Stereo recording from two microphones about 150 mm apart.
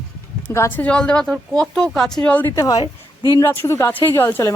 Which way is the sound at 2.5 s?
25° left (ahead or behind).